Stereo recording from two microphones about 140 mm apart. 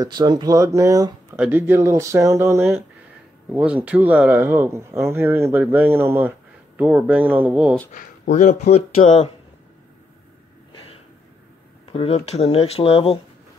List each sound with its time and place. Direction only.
0.0 s speech: 30° right (ahead or behind); by 7.7 s 10° right (ahead or behind)
7.9 s speech: 65° left (ahead or behind)
10.7 s snort: 40° left (ahead or behind)
11.9 s speech: 45° left (ahead or behind)